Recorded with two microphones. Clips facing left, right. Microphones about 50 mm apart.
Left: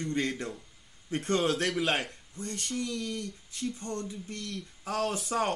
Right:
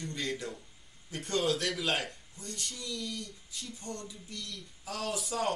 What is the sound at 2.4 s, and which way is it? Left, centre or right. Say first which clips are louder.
Speech: left 9 dB; left.